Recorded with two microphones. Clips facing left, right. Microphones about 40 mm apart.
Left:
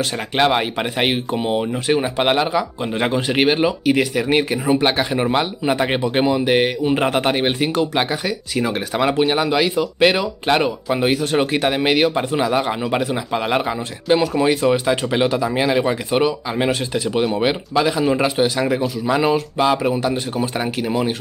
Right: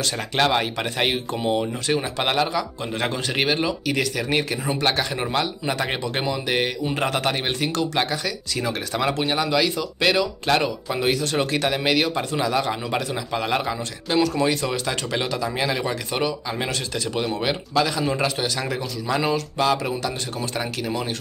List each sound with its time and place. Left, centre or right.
0.4 s speech: centre